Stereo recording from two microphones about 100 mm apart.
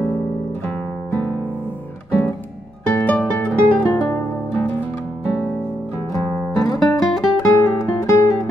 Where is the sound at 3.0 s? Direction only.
15° left (ahead or behind).